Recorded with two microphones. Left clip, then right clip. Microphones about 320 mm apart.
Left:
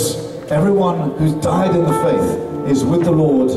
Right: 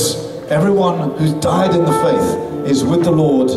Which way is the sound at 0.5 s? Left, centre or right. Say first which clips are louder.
Right 1 dB; centre.